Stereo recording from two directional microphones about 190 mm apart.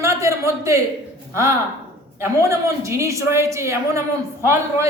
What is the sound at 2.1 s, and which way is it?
A man's voice, 15° right (ahead or behind).